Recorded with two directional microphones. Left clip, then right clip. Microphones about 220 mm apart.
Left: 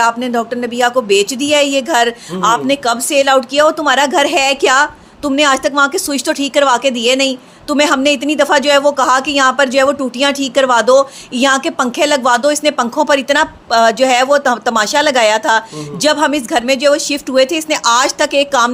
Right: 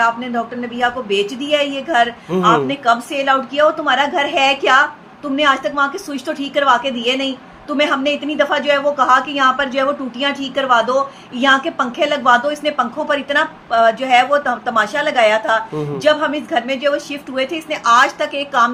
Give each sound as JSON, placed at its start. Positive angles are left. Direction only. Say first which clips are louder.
{"t": 0.0, "sound": "speech", "louder": "left 3 dB", "side_deg": 55}